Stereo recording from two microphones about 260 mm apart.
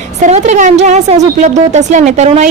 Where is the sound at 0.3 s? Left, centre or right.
Right.